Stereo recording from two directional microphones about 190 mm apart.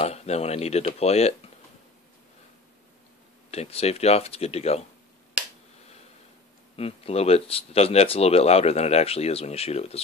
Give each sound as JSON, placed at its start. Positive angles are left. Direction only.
{"t": 0.0, "sound": "speech", "side_deg": 35}
{"t": 3.4, "sound": "speech", "side_deg": 35}
{"t": 6.8, "sound": "speech", "side_deg": 30}